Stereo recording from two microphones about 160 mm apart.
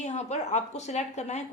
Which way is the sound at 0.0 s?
45° left (ahead or behind).